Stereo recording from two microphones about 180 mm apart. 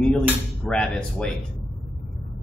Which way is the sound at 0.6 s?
5° left (ahead or behind).